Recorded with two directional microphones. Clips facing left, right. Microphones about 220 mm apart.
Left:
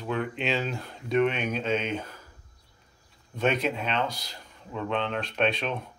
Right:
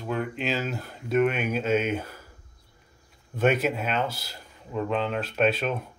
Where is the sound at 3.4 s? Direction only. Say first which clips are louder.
Right 3 dB; 5° right (ahead or behind).